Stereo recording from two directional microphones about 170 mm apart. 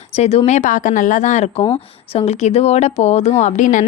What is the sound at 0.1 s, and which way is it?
A woman's voice, 35° left (ahead or behind).